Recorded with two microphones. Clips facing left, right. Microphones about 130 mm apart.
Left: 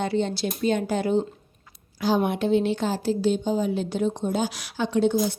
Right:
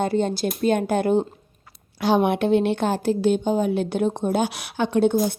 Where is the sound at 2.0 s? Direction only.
70° right (ahead or behind); by 5.3 s 55° right (ahead or behind).